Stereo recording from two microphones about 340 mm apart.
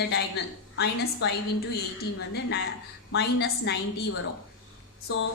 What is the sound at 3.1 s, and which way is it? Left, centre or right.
Speech, left.